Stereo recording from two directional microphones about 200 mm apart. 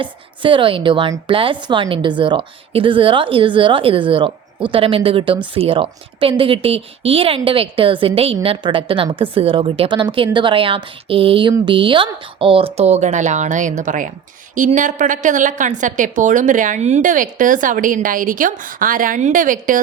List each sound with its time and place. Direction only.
0.0 s a woman's voice: 25° right (ahead or behind); by 19.8 s 40° right (ahead or behind)